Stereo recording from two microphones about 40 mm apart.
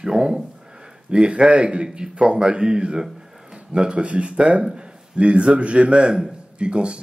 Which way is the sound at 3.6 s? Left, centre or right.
Right.